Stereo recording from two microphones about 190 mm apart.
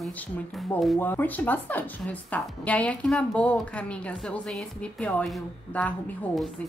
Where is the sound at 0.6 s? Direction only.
Centre (ahead or behind).